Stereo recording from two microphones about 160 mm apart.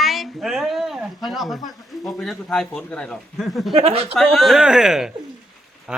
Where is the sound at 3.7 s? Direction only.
35° right (ahead or behind).